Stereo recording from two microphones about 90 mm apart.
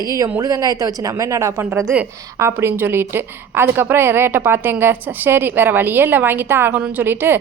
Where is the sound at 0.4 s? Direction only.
45° right (ahead or behind).